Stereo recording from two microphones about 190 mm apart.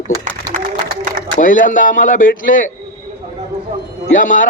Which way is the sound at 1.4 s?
45° left (ahead or behind).